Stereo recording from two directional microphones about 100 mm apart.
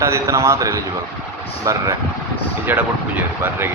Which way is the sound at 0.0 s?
30° right (ahead or behind).